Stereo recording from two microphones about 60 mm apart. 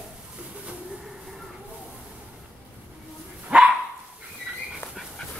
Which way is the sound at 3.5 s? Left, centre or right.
Centre.